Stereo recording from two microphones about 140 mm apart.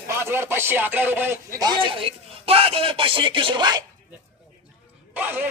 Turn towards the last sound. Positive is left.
turn(degrees=-10)  # may be behind; listen again after turning